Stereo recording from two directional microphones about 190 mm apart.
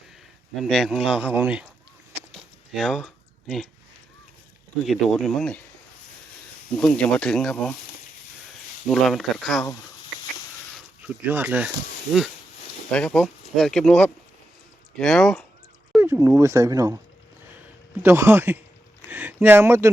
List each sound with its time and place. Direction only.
0.6 s speech: centre (ahead or behind)
2.3 s a sound: centre (ahead or behind)
4.9 s speech: centre (ahead or behind)
6.7 s speech: 5° left (ahead or behind)
8.9 s speech: centre (ahead or behind)
11.0 s speech: 10° right (ahead or behind)
12.9 s speech: 5° left (ahead or behind)
16.0 s speech: 10° right (ahead or behind)
18.0 s speech: 10° right (ahead or behind)